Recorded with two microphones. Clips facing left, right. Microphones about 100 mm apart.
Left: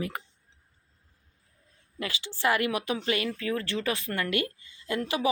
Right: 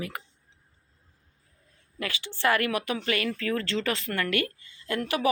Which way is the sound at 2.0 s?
20° left (ahead or behind).